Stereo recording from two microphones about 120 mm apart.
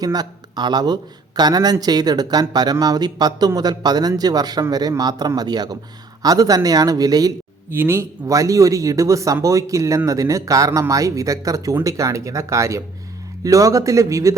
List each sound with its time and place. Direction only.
0.0 s speech: 35° right (ahead or behind)
7.7 s speech: 20° right (ahead or behind)